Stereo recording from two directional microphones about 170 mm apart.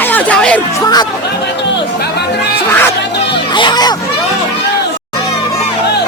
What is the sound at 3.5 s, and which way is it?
Children playing, 25° left (ahead or behind).